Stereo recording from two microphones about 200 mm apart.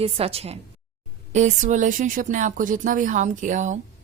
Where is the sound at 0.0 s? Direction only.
30° right (ahead or behind).